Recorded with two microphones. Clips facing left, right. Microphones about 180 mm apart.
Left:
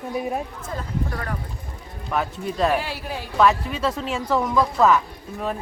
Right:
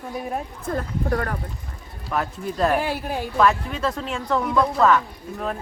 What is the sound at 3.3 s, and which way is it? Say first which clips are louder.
Speech: left 2 dB; 5° left (ahead or behind).